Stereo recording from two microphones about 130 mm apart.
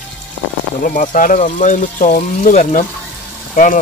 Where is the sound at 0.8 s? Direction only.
90° left.